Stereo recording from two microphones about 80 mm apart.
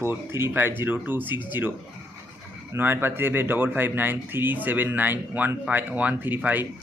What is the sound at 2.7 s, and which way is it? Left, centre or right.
Speech, right.